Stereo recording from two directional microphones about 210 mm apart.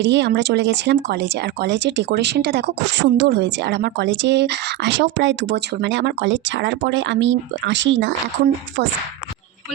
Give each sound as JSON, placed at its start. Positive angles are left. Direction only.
{"t": 0.0, "sound": "speech", "side_deg": -55}